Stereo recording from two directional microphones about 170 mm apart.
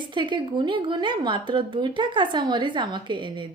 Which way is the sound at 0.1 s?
25° right (ahead or behind).